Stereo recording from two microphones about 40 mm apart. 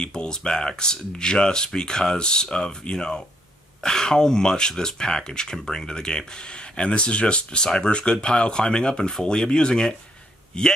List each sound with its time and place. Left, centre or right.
0.0 s speech: centre